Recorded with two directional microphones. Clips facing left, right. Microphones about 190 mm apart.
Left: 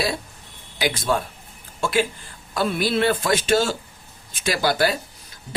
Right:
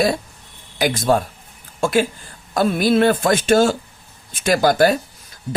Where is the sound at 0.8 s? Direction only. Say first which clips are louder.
Right 5 dB; 45° right (ahead or behind).